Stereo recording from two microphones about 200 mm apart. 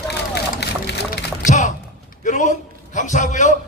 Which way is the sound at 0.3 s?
55° left (ahead or behind).